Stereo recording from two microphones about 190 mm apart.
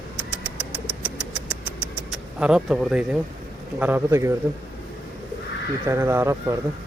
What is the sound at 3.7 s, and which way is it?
Speech, 10° right (ahead or behind).